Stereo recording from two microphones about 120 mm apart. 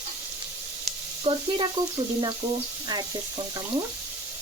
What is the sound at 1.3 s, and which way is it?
Frying, 55° right (ahead or behind).